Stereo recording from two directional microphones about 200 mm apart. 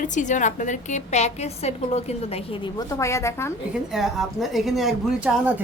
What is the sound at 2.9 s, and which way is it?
Speech, 15° left (ahead or behind).